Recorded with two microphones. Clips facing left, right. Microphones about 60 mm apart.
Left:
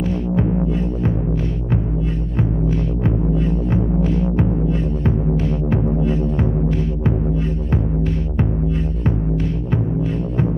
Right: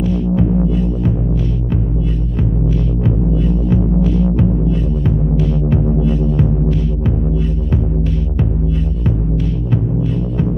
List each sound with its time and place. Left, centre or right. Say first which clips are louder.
0.0 s music: right 3 dB; left
3.0 s music: right 2 dB; left